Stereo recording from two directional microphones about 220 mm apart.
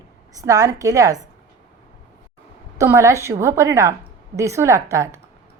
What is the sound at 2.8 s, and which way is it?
A woman's voice, 15° right (ahead or behind).